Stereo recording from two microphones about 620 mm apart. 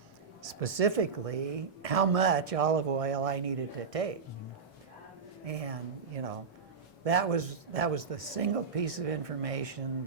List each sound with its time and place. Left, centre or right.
0.4 s a woman's voice: right
5.5 s a woman's voice: right